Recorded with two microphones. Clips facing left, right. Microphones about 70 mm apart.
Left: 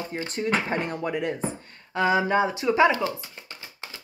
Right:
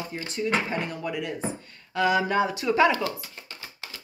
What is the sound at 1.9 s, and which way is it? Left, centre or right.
Speech, left.